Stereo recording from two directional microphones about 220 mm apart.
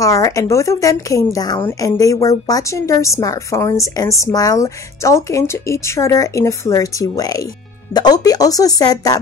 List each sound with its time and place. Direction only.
0.0 s a woman's voice: 15° left (ahead or behind)